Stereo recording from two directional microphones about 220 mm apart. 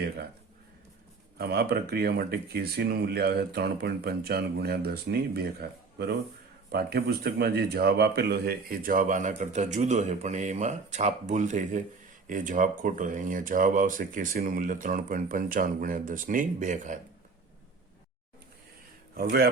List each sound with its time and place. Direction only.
1.4 s speech: 45° right (ahead or behind)
19.1 s speech: 45° right (ahead or behind)